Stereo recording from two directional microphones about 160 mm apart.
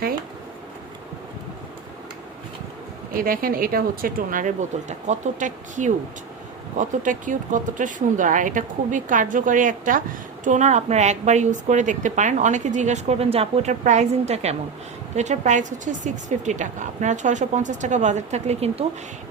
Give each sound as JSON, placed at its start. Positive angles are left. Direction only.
{"t": 3.1, "sound": "speech", "side_deg": -60}